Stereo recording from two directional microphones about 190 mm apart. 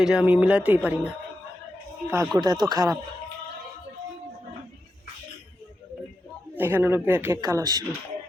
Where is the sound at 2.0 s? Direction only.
20° right (ahead or behind).